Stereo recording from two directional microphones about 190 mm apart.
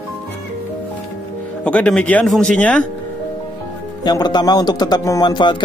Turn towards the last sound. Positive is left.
turn(degrees=25)  # may be behind; listen again after turning